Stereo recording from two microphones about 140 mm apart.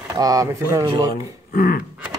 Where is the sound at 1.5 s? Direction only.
90° left.